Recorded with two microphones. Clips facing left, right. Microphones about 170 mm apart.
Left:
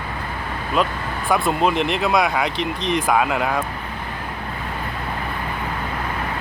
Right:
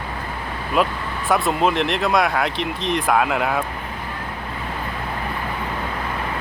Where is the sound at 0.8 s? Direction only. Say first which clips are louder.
Right 1 dB; 5° right (ahead or behind).